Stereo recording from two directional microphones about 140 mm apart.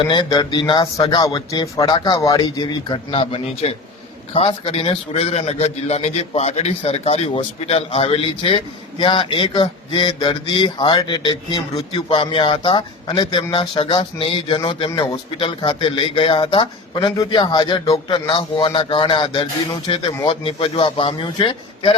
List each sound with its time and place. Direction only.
0.1 s speech: 30° left (ahead or behind)
3.1 s a man's voice: 45° left (ahead or behind)